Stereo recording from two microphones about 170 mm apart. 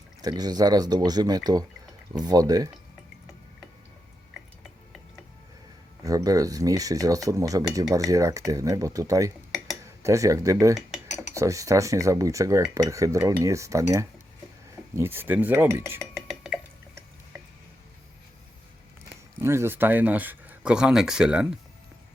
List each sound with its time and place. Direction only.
0.2 s speech: 25° right (ahead or behind)
6.0 s speech: 20° right (ahead or behind)
16.2 s dishes: centre (ahead or behind)
19.4 s speech: 15° right (ahead or behind)